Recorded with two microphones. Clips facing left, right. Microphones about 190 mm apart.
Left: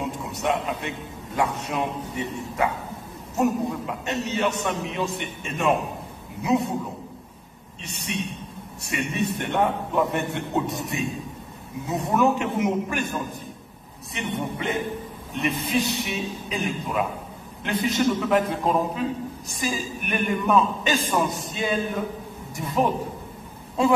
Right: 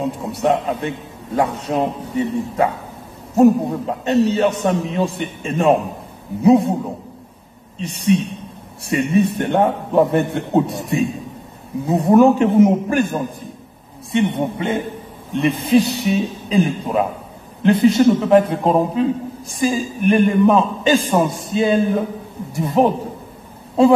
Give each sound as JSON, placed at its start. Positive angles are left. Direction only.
{"t": 0.2, "sound": "a man's voice", "side_deg": -30}
{"t": 7.8, "sound": "a man's voice", "side_deg": -30}